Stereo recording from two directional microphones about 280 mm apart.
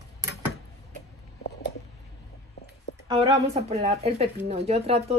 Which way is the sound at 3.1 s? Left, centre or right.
Centre.